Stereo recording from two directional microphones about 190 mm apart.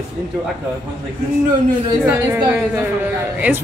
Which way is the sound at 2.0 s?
10° right (ahead or behind).